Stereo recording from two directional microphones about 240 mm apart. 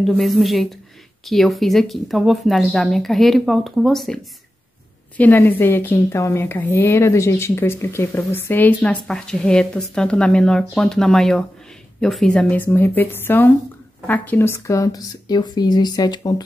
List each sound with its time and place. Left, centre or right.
0.0 s a woman's voice: centre